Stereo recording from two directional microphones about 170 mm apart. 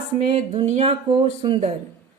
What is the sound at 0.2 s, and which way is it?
Speech, 40° right (ahead or behind).